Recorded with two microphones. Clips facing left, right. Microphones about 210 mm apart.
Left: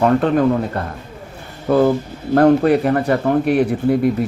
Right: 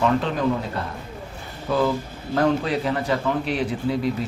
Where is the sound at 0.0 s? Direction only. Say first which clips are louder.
Left 7 dB; 55° left (ahead or behind).